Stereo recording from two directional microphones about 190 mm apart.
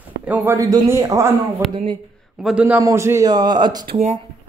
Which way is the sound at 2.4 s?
5° right (ahead or behind).